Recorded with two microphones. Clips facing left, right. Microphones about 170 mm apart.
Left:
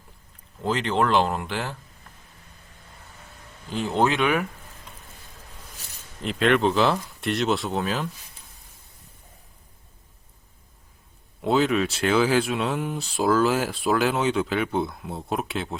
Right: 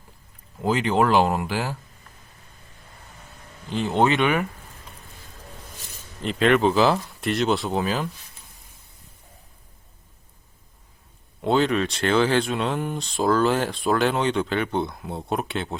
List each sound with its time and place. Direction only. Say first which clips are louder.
0.6 s speech: right 3 dB; 10° right (ahead or behind)
3.7 s speech: right 2 dB; centre (ahead or behind)
6.2 s speech: right 2 dB; centre (ahead or behind)
11.4 s speech: even; 5° left (ahead or behind)